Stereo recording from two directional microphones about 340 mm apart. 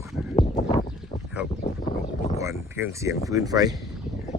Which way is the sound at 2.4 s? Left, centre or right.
Centre.